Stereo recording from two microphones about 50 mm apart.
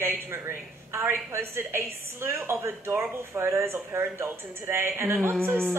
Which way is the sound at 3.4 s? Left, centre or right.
Right.